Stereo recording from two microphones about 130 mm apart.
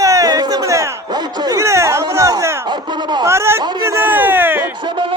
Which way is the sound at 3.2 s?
20° right (ahead or behind).